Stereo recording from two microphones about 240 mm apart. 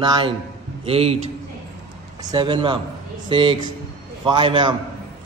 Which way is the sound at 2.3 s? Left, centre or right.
Centre.